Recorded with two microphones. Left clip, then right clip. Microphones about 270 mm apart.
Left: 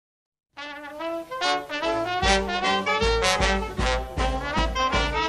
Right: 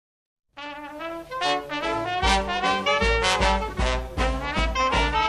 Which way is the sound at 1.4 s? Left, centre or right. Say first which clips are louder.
Even; centre.